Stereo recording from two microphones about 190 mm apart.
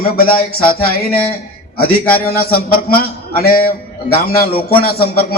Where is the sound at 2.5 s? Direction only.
50° left (ahead or behind).